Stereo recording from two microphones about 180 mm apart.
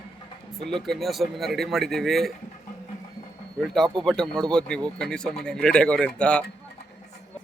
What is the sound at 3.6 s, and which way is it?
Speech, centre (ahead or behind).